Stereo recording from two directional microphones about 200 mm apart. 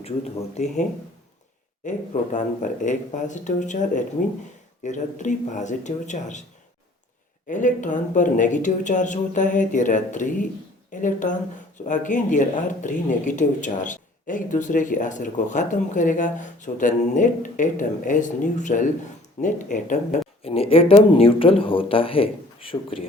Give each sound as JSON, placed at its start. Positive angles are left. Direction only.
{"t": 0.5, "sound": "speech", "side_deg": 35}
{"t": 7.4, "sound": "speech", "side_deg": 40}